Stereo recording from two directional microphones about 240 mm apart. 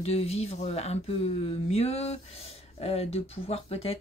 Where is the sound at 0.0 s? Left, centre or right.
Left.